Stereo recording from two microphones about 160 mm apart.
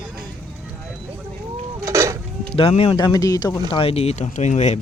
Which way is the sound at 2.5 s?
35° left (ahead or behind).